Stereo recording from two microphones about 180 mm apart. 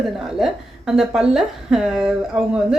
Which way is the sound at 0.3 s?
Centre (ahead or behind).